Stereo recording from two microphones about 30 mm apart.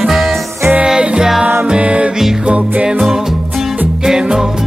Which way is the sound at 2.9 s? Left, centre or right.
Centre.